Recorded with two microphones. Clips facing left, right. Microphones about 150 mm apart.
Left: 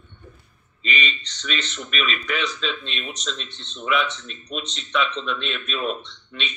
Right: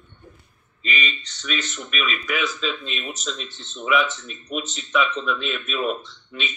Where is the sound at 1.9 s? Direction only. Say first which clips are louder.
Even; 5° right (ahead or behind).